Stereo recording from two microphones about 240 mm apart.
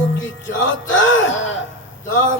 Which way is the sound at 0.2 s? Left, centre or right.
Left.